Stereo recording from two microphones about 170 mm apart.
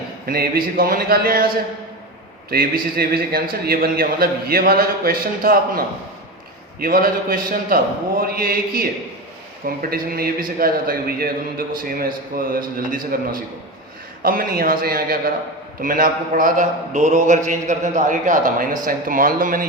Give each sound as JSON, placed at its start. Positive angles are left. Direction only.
{"t": 0.3, "sound": "a man's voice", "side_deg": -60}
{"t": 2.5, "sound": "a man's voice", "side_deg": -60}